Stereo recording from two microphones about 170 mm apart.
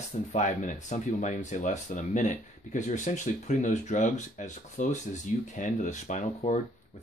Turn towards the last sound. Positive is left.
turn(degrees=45)  # may be behind; listen again after turning